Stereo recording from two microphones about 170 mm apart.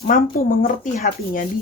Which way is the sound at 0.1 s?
55° left (ahead or behind).